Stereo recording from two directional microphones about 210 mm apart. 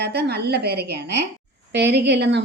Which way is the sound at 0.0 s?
50° right (ahead or behind).